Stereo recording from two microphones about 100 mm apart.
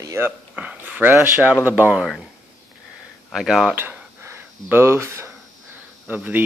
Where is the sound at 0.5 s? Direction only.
15° right (ahead or behind).